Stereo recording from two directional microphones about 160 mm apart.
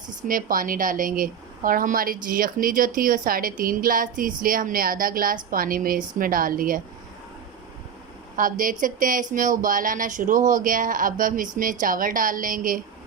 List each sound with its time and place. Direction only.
0.2 s speech: 60° right (ahead or behind)
8.4 s speech: 60° right (ahead or behind)